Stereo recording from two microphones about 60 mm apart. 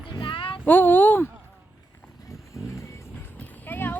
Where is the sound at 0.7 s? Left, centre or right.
Left.